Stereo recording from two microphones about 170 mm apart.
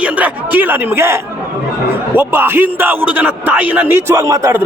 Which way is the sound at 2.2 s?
10° right (ahead or behind).